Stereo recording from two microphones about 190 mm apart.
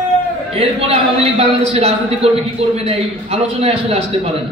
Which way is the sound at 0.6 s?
30° right (ahead or behind).